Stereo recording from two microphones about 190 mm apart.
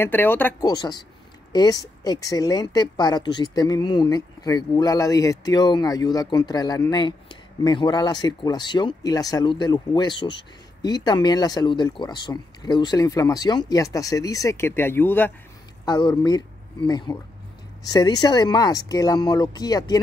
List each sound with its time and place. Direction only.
0.0 s speech: 10° left (ahead or behind)
15.8 s speech: 25° left (ahead or behind)